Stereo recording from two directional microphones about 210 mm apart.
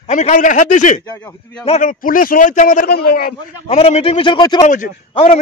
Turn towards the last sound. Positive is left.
turn(degrees=35)  # may be behind; listen again after turning